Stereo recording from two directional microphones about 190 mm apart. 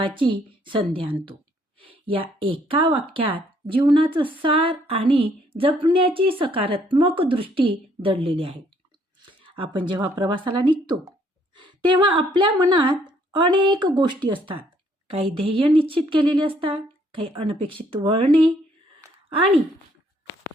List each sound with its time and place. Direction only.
0.0 s a woman's voice: 25° right (ahead or behind)